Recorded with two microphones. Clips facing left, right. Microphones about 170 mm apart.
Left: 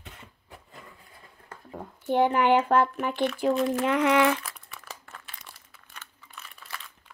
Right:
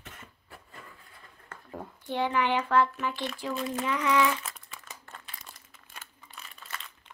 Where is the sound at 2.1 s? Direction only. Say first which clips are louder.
Left 6 dB; 50° left (ahead or behind); by 4.4 s 65° left (ahead or behind).